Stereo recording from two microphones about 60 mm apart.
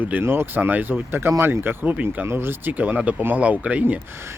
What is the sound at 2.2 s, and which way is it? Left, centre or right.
Speech, right.